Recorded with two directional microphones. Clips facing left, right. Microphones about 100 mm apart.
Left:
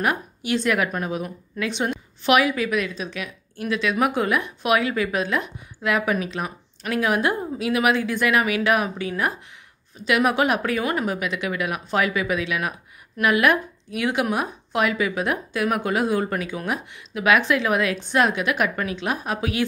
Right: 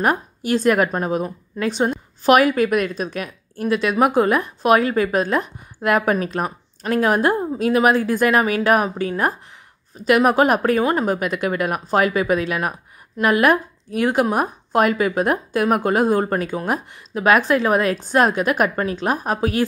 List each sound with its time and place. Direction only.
0.0 s a woman's voice: 40° right (ahead or behind)